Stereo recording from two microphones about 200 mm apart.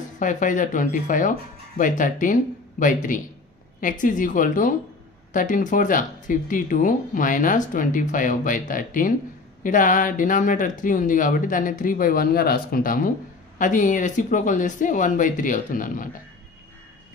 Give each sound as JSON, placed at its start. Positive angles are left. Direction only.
{"t": 0.2, "sound": "speech", "side_deg": 40}